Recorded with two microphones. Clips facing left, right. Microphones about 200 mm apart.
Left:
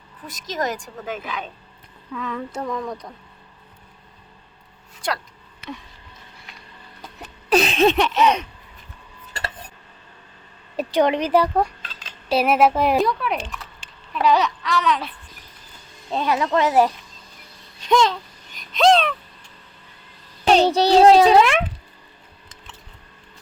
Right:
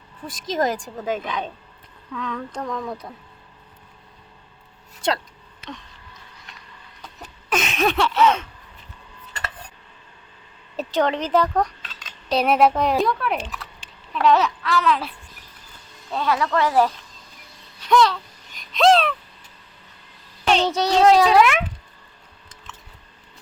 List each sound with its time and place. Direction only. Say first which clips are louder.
0.3 s a woman's voice: right 3 dB; 30° right (ahead or behind)
2.1 s speech: left 1 dB; 5° left (ahead or behind)
7.5 s a sound: left 5 dB; 35° left (ahead or behind); by 8.4 s 15° left (ahead or behind)
10.8 s speech: left 3 dB; 15° left (ahead or behind)
11.9 s cutlery: left 1 dB; 30° left (ahead or behind)
12.3 s speech: even; 5° left (ahead or behind)
16.0 s a sound: left 1 dB; 20° left (ahead or behind)
17.8 s speech: even; 15° left (ahead or behind)
18.5 s a sound: even; centre (ahead or behind)
20.5 s a child's voice: left 4 dB; 35° left (ahead or behind)